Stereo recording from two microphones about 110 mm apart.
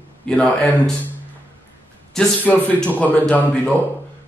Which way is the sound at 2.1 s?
15° left (ahead or behind).